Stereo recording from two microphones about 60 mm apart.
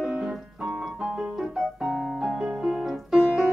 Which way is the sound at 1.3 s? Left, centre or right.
Centre.